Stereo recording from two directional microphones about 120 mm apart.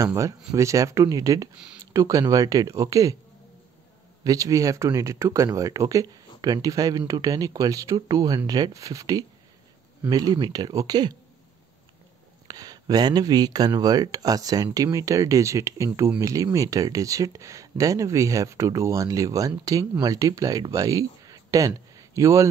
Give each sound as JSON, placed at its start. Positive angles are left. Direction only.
{"t": 0.0, "sound": "speech", "side_deg": -25}
{"t": 4.2, "sound": "speech", "side_deg": -30}
{"t": 12.4, "sound": "speech", "side_deg": -30}